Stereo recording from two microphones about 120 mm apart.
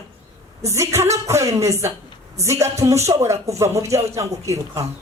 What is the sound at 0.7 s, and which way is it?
A woman's voice, 25° right (ahead or behind).